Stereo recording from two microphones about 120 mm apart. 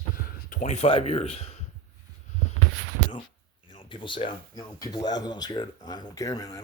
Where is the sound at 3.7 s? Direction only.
45° left (ahead or behind).